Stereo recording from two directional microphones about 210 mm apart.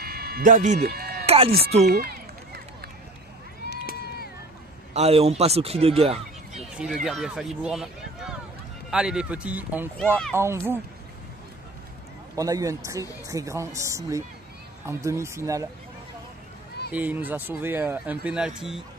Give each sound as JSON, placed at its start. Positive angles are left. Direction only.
{"t": 0.0, "sound": "a sound", "side_deg": -45}
{"t": 0.7, "sound": "music", "side_deg": -50}
{"t": 1.2, "sound": "speech", "side_deg": -30}
{"t": 1.9, "sound": "run", "side_deg": -50}
{"t": 3.6, "sound": "run", "side_deg": 50}
{"t": 4.9, "sound": "speech", "side_deg": -30}
{"t": 6.6, "sound": "speech", "side_deg": -5}
{"t": 12.4, "sound": "speech", "side_deg": -15}
{"t": 16.9, "sound": "speech", "side_deg": -5}